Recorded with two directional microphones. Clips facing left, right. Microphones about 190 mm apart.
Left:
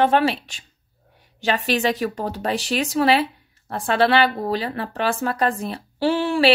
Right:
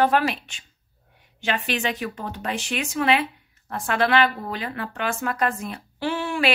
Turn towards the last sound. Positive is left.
turn(degrees=30)  # may be behind; listen again after turning